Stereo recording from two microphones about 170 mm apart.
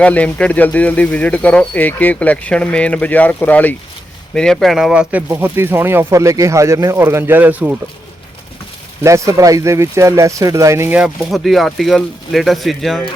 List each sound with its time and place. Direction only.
0.0 s speech: 10° left (ahead or behind); by 7.8 s 10° right (ahead or behind)
9.0 s speech: 20° right (ahead or behind); by 13.1 s centre (ahead or behind)